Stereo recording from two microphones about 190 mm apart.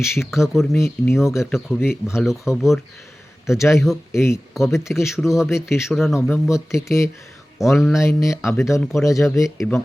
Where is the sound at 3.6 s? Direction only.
15° left (ahead or behind).